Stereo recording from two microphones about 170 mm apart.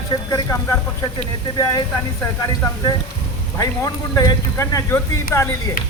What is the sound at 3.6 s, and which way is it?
Speech, 20° left (ahead or behind).